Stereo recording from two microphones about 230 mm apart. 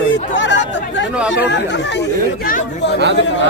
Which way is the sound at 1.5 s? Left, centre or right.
Left.